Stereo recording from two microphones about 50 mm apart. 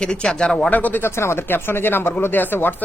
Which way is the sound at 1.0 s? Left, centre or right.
Left.